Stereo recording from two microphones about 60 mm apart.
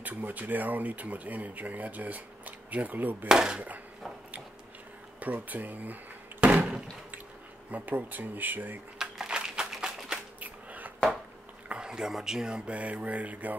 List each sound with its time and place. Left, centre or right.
0.0 s speech: right
3.3 s speech: centre
5.2 s speech: right
6.4 s door: right
7.7 s speech: right
8.9 s a sound: centre
10.4 s a sound: right
11.7 s speech: centre